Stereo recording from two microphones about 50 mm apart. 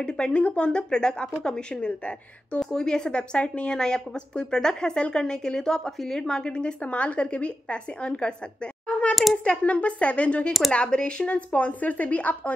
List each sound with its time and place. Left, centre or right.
0.0 s a woman's voice: left
2.6 s a woman's voice: centre
9.1 s a sound: centre
9.4 s a woman's voice: left